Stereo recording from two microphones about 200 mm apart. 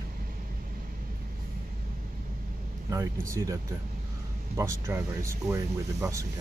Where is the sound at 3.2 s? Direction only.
15° right (ahead or behind).